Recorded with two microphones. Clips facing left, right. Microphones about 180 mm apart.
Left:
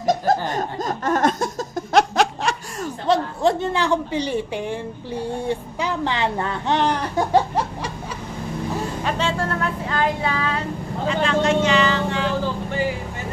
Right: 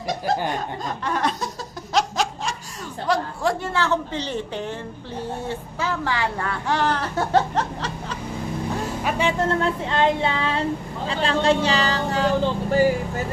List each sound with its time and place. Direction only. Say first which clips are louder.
0.5 s laughter: left 3 dB; 45° left (ahead or behind); by 2.5 s 60° left (ahead or behind)
3.1 s a woman's voice: left 4 dB; 20° left (ahead or behind)
9.0 s speech: right 3 dB; 15° right (ahead or behind); by 12.9 s 40° right (ahead or behind)